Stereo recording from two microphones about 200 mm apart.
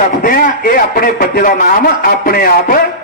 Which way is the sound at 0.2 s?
45° left (ahead or behind).